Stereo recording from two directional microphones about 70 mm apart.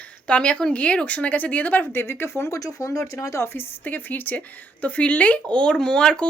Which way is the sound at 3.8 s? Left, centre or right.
Left.